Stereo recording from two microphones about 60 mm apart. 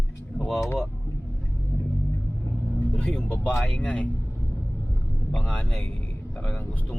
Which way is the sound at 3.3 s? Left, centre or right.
Left.